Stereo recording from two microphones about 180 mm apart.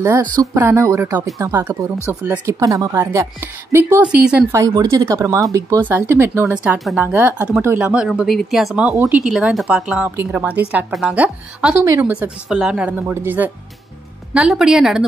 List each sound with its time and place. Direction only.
0.4 s speech: 15° right (ahead or behind)
4.5 s a woman's voice: 20° right (ahead or behind); by 15.0 s 5° right (ahead or behind)